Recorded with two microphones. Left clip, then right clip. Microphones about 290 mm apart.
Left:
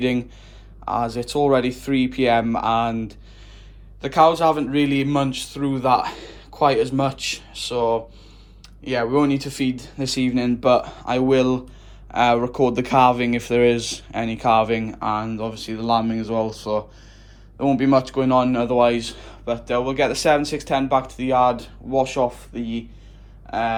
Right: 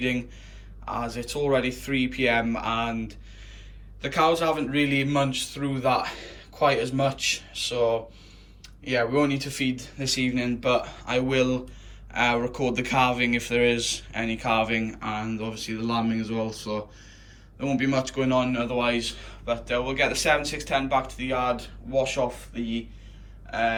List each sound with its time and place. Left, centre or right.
0.0 s a man's voice: centre